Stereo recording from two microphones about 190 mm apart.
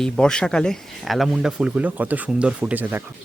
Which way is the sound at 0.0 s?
5° left (ahead or behind).